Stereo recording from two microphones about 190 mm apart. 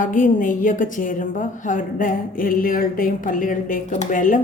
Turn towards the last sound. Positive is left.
turn(degrees=45)  # may be behind; listen again after turning